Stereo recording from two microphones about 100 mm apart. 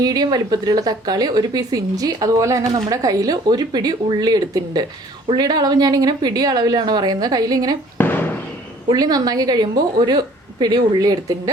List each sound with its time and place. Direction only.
0.0 s speech: 40° right (ahead or behind)
7.9 s fireworks: 20° left (ahead or behind)
8.9 s speech: 40° right (ahead or behind)